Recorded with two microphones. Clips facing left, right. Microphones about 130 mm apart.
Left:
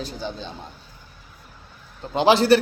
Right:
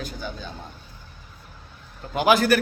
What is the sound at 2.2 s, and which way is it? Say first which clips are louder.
Speech: left 3 dB; 30° left (ahead or behind).